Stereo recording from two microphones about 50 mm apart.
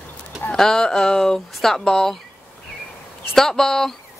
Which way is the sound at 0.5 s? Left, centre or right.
Centre.